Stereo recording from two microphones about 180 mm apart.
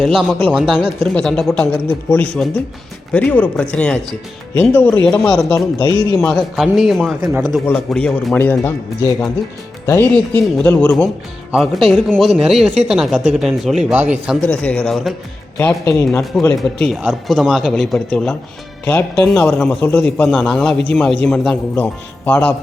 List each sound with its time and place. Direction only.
0.0 s a man's voice: centre (ahead or behind)
5.8 s speech: 25° left (ahead or behind)
6.1 s a man's voice: centre (ahead or behind)
7.2 s speech: 20° right (ahead or behind)
7.6 s speech: 5° left (ahead or behind)
10.6 s a man's voice: 5° left (ahead or behind)
14.4 s a man's voice: 5° left (ahead or behind)
15.5 s speech: 15° left (ahead or behind)
16.1 s a man's voice: 5° left (ahead or behind)